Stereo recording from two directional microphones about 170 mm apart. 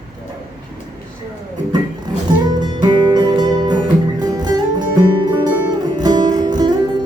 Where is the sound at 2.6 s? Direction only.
25° right (ahead or behind).